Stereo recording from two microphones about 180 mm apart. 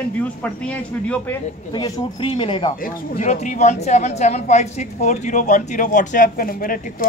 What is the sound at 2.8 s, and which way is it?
A woman's voice, 45° left (ahead or behind).